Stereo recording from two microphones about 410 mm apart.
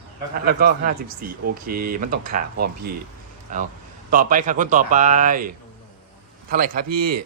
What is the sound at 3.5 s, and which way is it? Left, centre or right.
Speech, centre.